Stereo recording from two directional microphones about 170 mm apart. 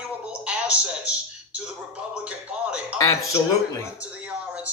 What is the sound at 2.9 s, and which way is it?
Speech, 20° left (ahead or behind).